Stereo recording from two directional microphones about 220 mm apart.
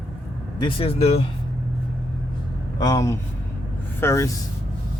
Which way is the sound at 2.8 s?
15° left (ahead or behind).